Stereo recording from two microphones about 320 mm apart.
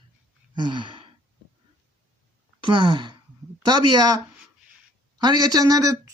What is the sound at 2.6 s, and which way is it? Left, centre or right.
Speech, centre.